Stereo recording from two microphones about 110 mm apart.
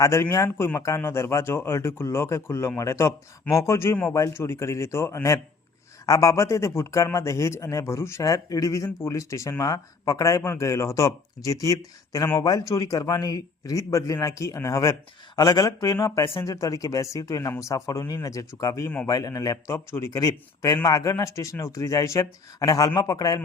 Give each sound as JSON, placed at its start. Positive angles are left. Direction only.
{"t": 0.0, "sound": "speech", "side_deg": 25}
{"t": 15.4, "sound": "a man's voice", "side_deg": 40}